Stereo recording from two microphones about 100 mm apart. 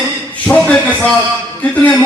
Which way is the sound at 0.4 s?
15° left (ahead or behind).